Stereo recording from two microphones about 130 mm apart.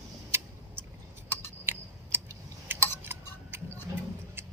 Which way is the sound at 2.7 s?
15° right (ahead or behind).